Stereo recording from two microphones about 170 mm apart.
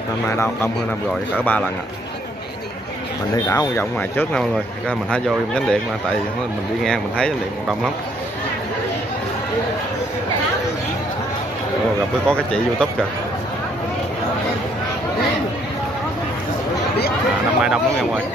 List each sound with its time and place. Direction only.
0.3 s speech: 15° left (ahead or behind)
3.4 s speech: 15° left (ahead or behind)
6.8 s speech: 5° left (ahead or behind)
12.3 s speech: 5° left (ahead or behind)
17.6 s speech: 5° right (ahead or behind)